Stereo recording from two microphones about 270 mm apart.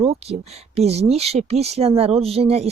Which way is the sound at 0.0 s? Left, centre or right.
Right.